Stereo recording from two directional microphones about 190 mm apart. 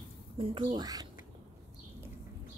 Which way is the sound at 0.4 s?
25° right (ahead or behind).